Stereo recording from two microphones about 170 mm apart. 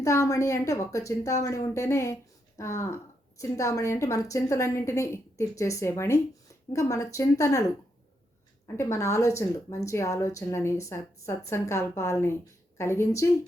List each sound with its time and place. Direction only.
0.0 s speech: 20° left (ahead or behind)